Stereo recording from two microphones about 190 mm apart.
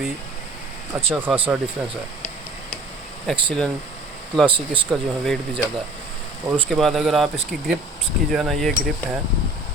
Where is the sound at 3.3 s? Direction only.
Centre (ahead or behind).